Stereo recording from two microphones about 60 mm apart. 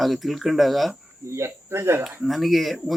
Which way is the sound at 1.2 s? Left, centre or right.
Right.